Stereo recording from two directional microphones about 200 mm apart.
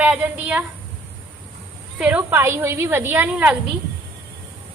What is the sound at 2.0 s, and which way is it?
A woman's voice, 5° right (ahead or behind).